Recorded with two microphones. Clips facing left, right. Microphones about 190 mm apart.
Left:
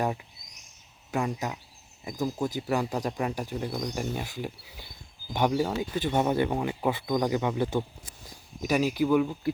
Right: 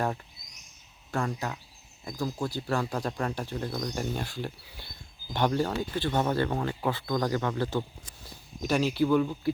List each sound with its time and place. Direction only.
1.1 s speech: 15° left (ahead or behind)